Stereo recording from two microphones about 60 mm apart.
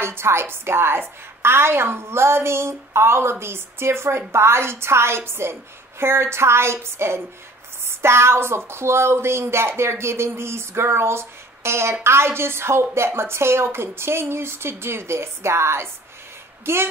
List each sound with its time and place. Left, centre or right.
0.0 s speech: right